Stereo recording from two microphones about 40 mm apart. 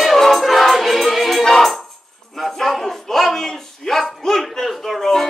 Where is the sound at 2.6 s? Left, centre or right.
Centre.